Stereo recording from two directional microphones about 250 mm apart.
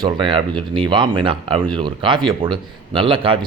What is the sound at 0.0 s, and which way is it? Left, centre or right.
Speech, centre.